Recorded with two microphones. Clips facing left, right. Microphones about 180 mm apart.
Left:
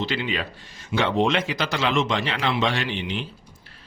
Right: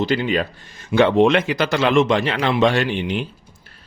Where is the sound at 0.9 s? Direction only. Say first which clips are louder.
Right 7 dB; 60° right (ahead or behind).